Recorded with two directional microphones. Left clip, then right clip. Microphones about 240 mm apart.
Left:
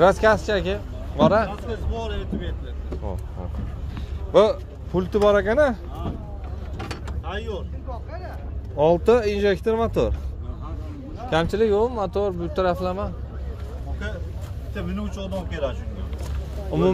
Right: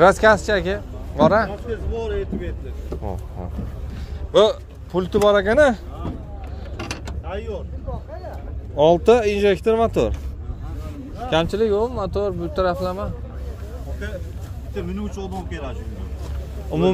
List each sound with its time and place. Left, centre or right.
0.0 s speech: right
1.9 s speech: left
4.3 s speech: centre
7.2 s speech: left
8.7 s speech: centre
11.2 s speech: centre
15.0 s speech: left
16.7 s speech: centre